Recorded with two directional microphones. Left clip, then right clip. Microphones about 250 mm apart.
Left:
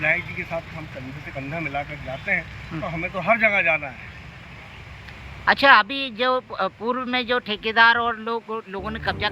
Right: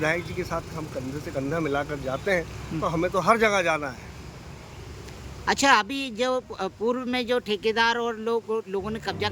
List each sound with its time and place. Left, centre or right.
0.0 s speech: centre
2.8 s speech: centre
5.5 s speech: centre